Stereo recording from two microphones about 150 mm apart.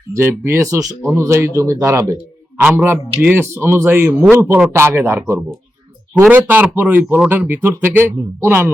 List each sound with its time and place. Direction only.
0.1 s speech: 15° right (ahead or behind)